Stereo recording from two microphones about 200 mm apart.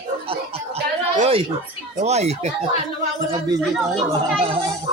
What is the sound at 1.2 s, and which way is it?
Speech, 30° right (ahead or behind).